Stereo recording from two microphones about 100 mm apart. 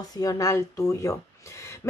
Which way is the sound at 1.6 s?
30° left (ahead or behind).